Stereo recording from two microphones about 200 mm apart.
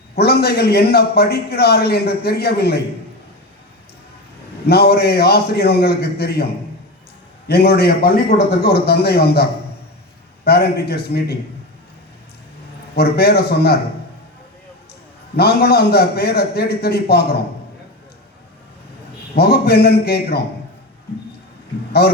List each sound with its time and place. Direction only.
0.2 s a man's voice: 55° left (ahead or behind)
4.6 s a man's voice: 55° left (ahead or behind)
13.0 s a man's voice: 50° left (ahead or behind)
15.4 s a man's voice: 50° left (ahead or behind)
19.4 s a man's voice: 55° left (ahead or behind)